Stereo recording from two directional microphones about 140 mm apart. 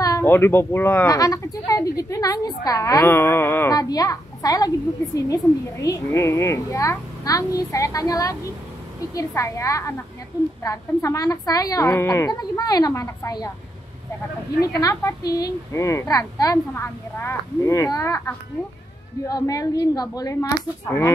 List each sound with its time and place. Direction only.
0.0 s speech: 20° left (ahead or behind)
14.6 s speech: 25° left (ahead or behind)